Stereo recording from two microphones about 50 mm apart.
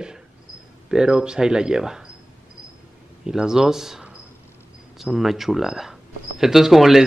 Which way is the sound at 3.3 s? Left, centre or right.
Centre.